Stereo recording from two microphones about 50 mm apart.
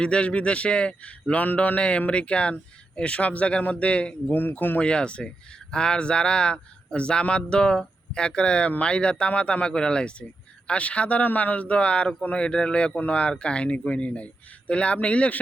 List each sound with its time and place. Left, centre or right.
0.0 s speech: left
4.4 s speech: left
4.8 s speech: left